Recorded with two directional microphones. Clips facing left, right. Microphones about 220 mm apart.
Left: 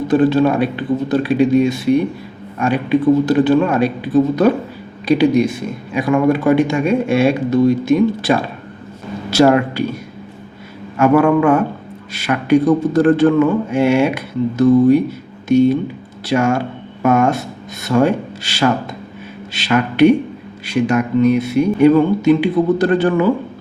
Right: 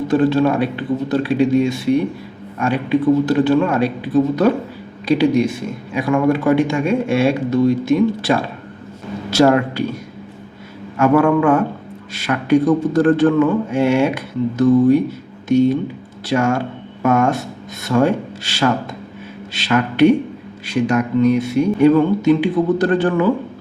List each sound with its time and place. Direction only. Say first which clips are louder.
0.1 s a man's voice: left 2 dB; 20° left (ahead or behind)
10.9 s speech: left 2 dB; 10° left (ahead or behind)